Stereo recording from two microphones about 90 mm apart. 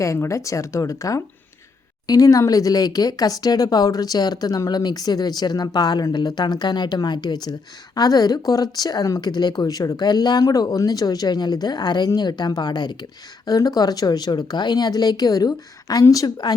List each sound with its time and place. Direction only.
0.0 s speech: 35° left (ahead or behind)